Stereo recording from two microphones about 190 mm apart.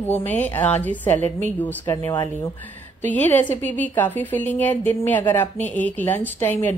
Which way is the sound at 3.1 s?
10° left (ahead or behind).